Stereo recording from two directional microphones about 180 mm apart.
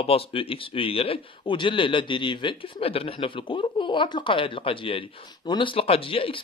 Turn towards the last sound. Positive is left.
turn(degrees=30)  # may be behind; listen again after turning